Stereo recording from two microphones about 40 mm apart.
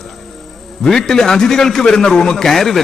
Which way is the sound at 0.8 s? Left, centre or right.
Centre.